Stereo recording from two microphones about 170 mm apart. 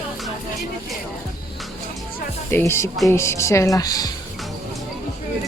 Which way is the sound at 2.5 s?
15° left (ahead or behind).